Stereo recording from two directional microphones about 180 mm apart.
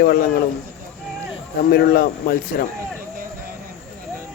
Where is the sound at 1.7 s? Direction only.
60° left (ahead or behind).